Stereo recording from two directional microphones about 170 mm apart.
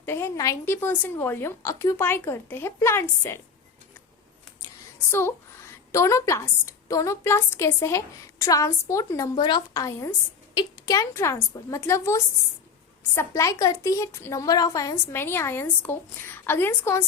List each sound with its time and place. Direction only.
0.0 s a woman's voice: 15° left (ahead or behind)
4.9 s a child's voice: 15° left (ahead or behind)